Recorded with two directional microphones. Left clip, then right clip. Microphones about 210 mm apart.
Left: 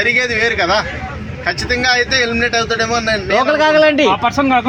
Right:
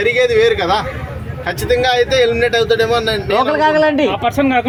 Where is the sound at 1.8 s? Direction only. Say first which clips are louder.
Right 1 dB; 15° right (ahead or behind).